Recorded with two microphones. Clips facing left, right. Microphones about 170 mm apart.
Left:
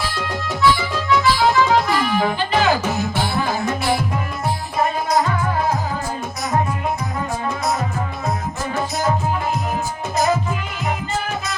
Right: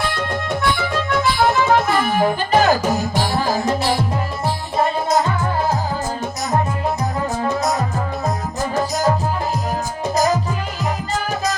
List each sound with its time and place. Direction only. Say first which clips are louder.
0.6 s music: left 6 dB; 55° right (ahead or behind); by 3.5 s 35° right (ahead or behind)